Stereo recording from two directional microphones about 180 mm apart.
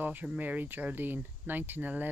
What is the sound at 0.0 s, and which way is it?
Speech, 10° right (ahead or behind).